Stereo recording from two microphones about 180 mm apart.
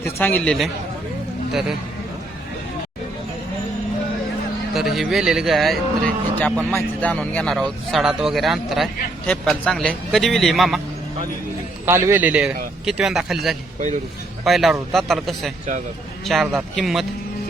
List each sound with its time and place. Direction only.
0.2 s speech: 10° left (ahead or behind)
4.7 s speech: centre (ahead or behind)
11.9 s a man's voice: 15° right (ahead or behind)
13.7 s a man's voice: 40° right (ahead or behind)
14.4 s speech: centre (ahead or behind)